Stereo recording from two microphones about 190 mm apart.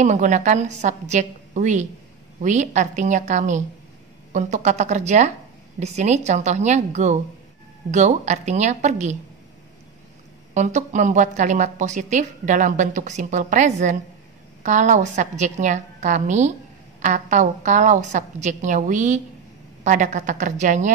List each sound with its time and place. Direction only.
0.0 s a woman's voice: 40° right (ahead or behind)
10.5 s a woman's voice: 40° right (ahead or behind)